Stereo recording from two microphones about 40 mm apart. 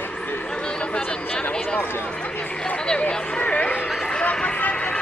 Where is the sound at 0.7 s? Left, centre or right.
Left.